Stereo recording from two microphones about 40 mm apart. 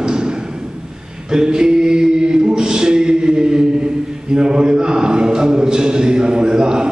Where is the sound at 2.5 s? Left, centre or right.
Centre.